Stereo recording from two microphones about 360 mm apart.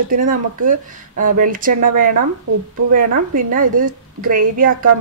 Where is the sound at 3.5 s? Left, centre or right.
Right.